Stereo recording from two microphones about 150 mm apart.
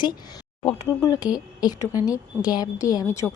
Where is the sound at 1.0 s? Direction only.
25° left (ahead or behind).